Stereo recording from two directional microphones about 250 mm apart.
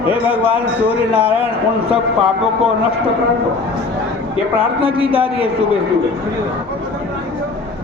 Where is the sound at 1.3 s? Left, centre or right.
Left.